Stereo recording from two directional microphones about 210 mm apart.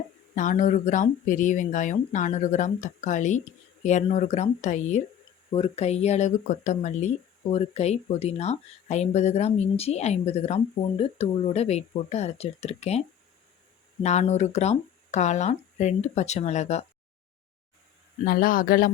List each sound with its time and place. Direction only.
0.3 s speech: 35° left (ahead or behind)
18.3 s speech: 45° left (ahead or behind)